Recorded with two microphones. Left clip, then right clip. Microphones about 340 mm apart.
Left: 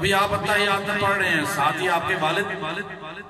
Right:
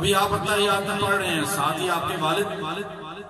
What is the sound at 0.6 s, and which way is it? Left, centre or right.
A man's voice, centre.